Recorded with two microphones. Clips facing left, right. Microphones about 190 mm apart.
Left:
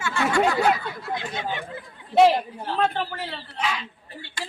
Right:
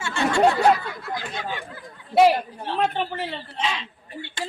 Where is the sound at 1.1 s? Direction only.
25° left (ahead or behind).